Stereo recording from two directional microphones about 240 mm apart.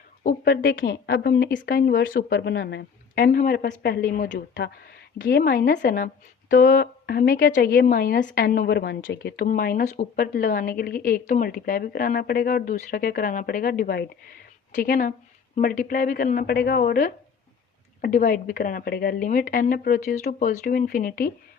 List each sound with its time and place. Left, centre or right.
0.2 s a woman's voice: left